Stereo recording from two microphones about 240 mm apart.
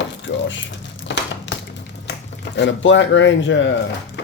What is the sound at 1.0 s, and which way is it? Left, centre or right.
Crumpling, left.